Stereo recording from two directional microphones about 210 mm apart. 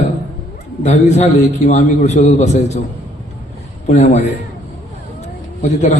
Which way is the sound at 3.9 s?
30° left (ahead or behind).